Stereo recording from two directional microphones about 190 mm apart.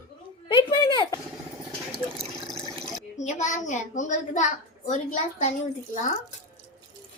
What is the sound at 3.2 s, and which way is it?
A woman's voice, 40° left (ahead or behind).